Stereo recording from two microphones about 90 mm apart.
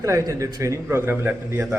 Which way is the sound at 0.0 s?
35° right (ahead or behind).